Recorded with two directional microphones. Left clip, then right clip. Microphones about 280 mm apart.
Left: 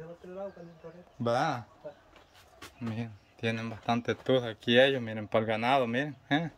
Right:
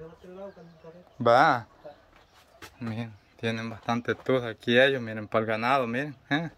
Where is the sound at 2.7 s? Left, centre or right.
Centre.